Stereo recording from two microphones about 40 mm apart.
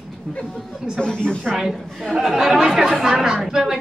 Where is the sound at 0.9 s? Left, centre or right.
Centre.